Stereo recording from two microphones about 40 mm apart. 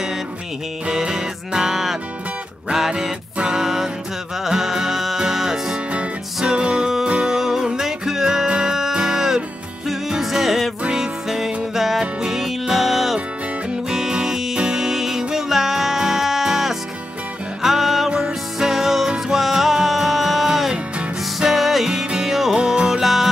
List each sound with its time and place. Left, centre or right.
0.8 s music: centre
5.9 s music: right
7.3 s music: centre